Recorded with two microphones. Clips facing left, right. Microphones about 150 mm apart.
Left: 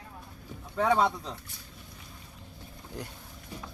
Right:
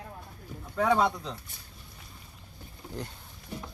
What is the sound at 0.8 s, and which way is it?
Speech, 5° right (ahead or behind).